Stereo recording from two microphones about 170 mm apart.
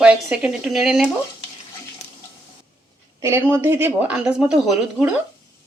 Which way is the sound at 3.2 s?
15° right (ahead or behind).